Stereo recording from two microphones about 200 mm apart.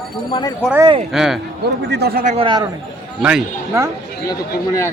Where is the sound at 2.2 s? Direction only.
30° right (ahead or behind).